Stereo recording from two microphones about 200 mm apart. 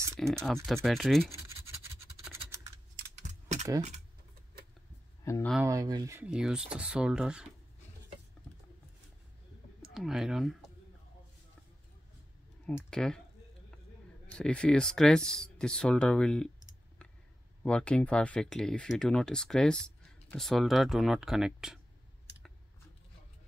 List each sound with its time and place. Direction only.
0.2 s speech: centre (ahead or behind)
3.0 s typing: 40° right (ahead or behind)
5.2 s speech: 15° left (ahead or behind)
5.7 s speech: 20° right (ahead or behind)
6.3 s speech: 5° right (ahead or behind)
9.8 s speech: centre (ahead or behind)
12.6 s speech: 5° left (ahead or behind)
14.2 s speech: 5° left (ahead or behind)